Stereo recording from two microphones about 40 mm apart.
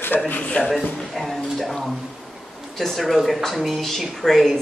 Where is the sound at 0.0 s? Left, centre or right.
Left.